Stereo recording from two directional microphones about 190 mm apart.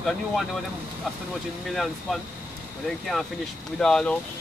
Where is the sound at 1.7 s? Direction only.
Centre (ahead or behind).